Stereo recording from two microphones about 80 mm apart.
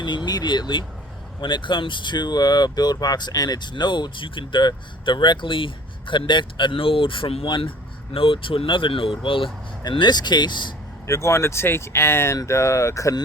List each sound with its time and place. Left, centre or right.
0.3 s a sound: left
1.4 s speech: left
11.0 s speech: left